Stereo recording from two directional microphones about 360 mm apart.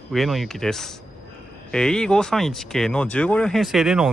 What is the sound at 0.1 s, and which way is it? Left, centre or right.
Speech, centre.